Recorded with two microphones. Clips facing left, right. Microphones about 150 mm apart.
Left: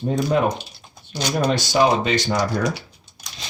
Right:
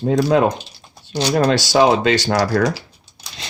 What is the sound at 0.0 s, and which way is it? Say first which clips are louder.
Speech: right 5 dB; 90° right.